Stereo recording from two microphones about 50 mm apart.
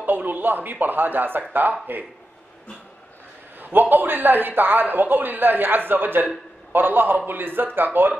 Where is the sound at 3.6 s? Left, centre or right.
Right.